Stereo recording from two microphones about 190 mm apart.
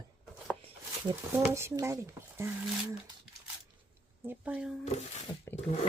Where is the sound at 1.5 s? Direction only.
15° right (ahead or behind).